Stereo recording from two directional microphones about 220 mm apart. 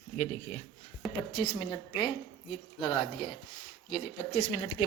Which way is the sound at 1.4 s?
20° left (ahead or behind).